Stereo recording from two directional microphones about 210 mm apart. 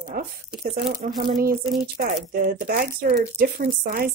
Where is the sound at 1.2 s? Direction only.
40° right (ahead or behind).